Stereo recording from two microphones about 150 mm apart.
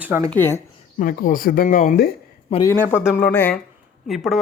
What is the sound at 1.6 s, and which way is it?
Speech, 60° left (ahead or behind).